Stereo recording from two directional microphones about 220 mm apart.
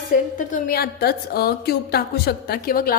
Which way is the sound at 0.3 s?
40° left (ahead or behind).